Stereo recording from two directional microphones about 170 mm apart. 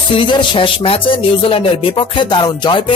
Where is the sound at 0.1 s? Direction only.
30° left (ahead or behind).